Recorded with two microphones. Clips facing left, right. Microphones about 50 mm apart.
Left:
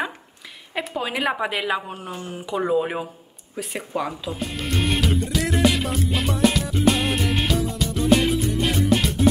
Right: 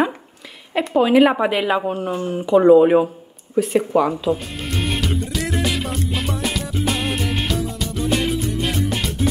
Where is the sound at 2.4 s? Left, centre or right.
Centre.